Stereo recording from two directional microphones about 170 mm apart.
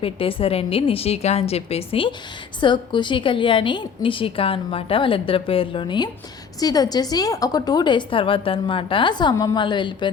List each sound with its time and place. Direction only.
0.0 s a woman's voice: 35° left (ahead or behind)